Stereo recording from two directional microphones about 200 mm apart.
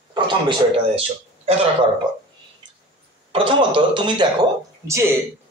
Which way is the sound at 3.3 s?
25° right (ahead or behind).